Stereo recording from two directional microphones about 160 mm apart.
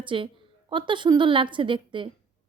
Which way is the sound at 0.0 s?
30° right (ahead or behind).